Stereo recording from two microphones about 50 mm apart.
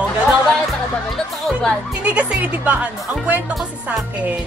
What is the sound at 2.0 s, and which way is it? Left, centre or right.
Speech, right.